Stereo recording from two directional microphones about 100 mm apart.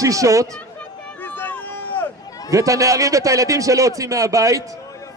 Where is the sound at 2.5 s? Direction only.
35° right (ahead or behind).